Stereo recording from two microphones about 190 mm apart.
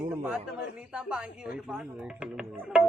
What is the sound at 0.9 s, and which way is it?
Speech, 5° right (ahead or behind).